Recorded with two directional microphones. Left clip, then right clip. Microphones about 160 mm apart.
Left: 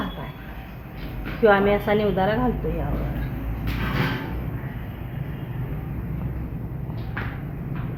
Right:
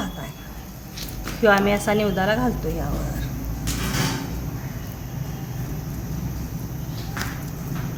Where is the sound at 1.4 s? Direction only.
Centre (ahead or behind).